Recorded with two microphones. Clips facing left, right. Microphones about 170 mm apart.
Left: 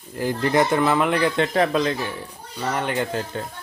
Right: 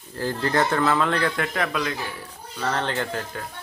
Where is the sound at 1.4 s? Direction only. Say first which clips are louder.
Left 6 dB; 30° left (ahead or behind).